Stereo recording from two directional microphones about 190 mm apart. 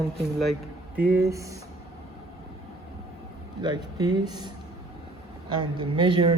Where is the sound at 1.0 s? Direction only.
10° right (ahead or behind).